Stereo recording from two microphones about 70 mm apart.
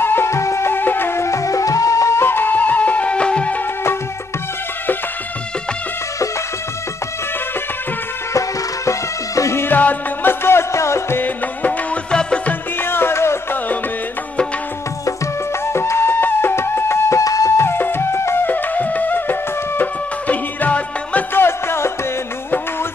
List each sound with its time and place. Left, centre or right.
0.0 s music: left
0.7 s music: left
2.2 s music: left
8.3 s music: left
9.6 s music: left
12.1 s music: centre
12.8 s music: left
15.6 s music: left
17.2 s music: left
17.6 s music: left
21.4 s music: left